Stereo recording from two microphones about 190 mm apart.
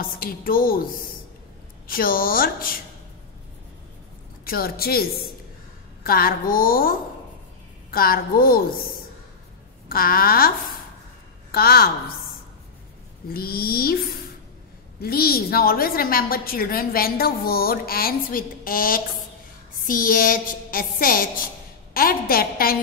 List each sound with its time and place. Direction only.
0.0 s a woman's voice: 50° left (ahead or behind)
1.9 s a woman's voice: 50° left (ahead or behind)
4.5 s a woman's voice: 50° left (ahead or behind)
6.0 s a woman's voice: 50° left (ahead or behind)
11.5 s a woman's voice: 55° left (ahead or behind)
13.3 s a woman's voice: 50° left (ahead or behind)
15.0 s a woman's voice: 50° left (ahead or behind)